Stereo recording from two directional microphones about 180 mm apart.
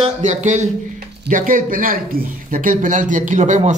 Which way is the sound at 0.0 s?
40° right (ahead or behind).